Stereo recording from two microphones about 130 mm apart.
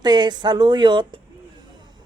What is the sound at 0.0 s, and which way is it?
Speech, 35° right (ahead or behind).